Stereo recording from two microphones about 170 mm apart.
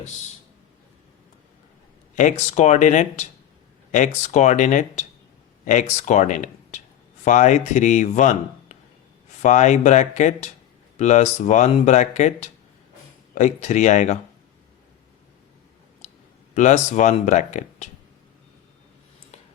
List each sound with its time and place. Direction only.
2.1 s speech: 45° left (ahead or behind)
16.0 s clicking: 45° left (ahead or behind)
16.6 s speech: 45° left (ahead or behind)